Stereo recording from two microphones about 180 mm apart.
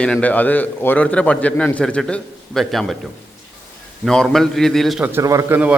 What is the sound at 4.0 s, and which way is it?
A man's voice, 5° left (ahead or behind).